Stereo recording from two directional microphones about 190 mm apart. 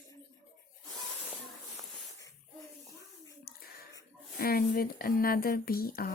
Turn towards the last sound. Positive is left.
turn(degrees=50)  # may be behind; listen again after turning